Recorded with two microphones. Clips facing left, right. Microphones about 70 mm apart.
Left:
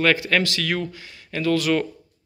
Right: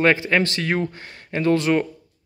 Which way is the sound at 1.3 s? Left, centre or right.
Right.